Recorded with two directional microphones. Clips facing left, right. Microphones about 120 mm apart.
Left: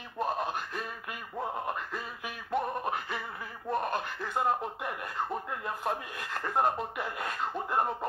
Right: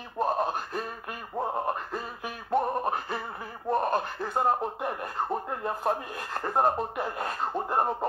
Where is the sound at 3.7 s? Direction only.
40° right (ahead or behind).